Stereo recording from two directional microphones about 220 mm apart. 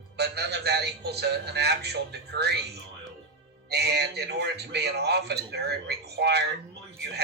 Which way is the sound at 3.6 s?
50° right (ahead or behind).